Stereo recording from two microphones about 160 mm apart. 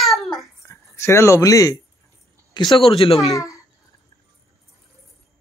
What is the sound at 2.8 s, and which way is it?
Speech, 35° left (ahead or behind).